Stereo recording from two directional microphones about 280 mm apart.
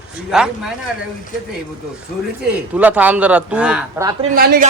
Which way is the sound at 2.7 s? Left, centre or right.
Centre.